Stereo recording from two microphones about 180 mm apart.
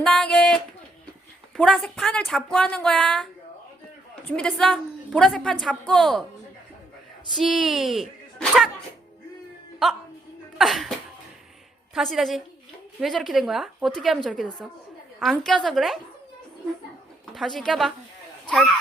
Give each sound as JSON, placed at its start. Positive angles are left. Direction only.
{"t": 0.0, "sound": "a sound", "side_deg": 5}
{"t": 1.5, "sound": "a woman's voice", "side_deg": 5}
{"t": 7.3, "sound": "speech", "side_deg": 0}
{"t": 10.6, "sound": "cough", "side_deg": 0}
{"t": 11.9, "sound": "a woman's voice", "side_deg": 0}
{"t": 17.3, "sound": "a woman's voice", "side_deg": 0}